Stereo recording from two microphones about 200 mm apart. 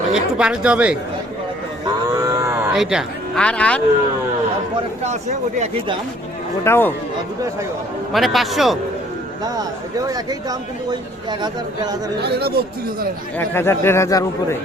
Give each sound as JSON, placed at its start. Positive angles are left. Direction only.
{"t": 0.1, "sound": "speech", "side_deg": -5}
{"t": 2.0, "sound": "cattle", "side_deg": -15}
{"t": 2.7, "sound": "speech", "side_deg": 0}
{"t": 6.7, "sound": "speech", "side_deg": 10}
{"t": 8.1, "sound": "speech", "side_deg": 0}
{"t": 10.1, "sound": "speech", "side_deg": -20}
{"t": 12.2, "sound": "speech", "side_deg": -55}
{"t": 13.4, "sound": "speech", "side_deg": 10}